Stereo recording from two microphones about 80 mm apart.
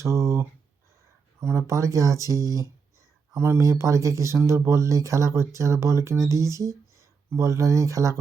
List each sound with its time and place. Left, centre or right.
0.0 s speech: right
3.3 s speech: right